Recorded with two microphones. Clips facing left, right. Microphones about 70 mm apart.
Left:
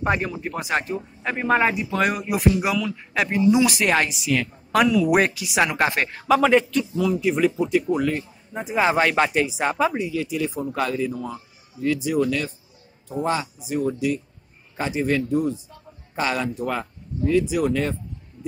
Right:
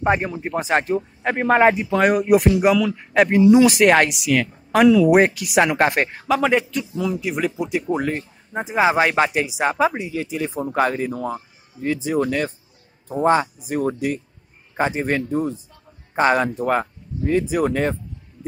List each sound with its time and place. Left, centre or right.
0.0 s speech: right
3.8 s speech: right
5.3 s speech: right
5.6 s speech: right
6.2 s a man's voice: centre
7.9 s speech: right
8.6 s a man's voice: centre
10.0 s speech: right